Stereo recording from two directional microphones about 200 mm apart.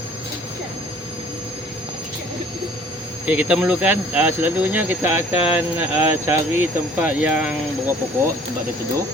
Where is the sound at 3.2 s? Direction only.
5° right (ahead or behind).